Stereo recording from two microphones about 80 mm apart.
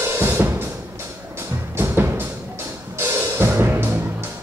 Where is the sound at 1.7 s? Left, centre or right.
Right.